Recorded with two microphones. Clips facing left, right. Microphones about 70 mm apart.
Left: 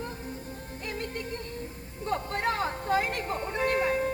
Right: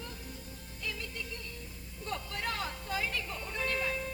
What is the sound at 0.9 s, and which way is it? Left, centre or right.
Music, left.